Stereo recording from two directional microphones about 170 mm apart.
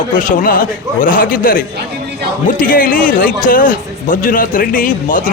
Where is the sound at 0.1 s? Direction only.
50° left (ahead or behind).